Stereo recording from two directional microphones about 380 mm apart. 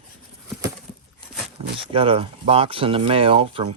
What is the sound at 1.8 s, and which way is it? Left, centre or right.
Speech, centre.